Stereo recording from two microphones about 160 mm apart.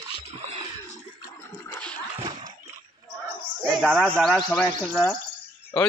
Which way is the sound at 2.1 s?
20° right (ahead or behind).